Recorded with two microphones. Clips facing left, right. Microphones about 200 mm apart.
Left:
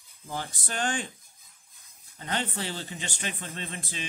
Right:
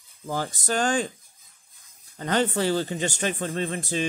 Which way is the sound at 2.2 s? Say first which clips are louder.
Right 9 dB; 45° right (ahead or behind).